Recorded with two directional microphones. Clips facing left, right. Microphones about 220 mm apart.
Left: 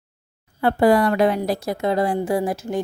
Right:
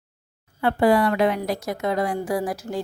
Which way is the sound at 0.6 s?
40° left (ahead or behind).